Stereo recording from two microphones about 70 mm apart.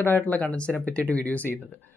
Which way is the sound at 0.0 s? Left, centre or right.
Left.